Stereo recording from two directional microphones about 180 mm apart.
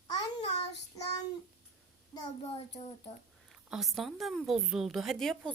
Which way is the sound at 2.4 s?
35° left (ahead or behind).